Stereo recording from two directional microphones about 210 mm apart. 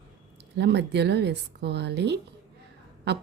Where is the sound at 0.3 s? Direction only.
55° right (ahead or behind).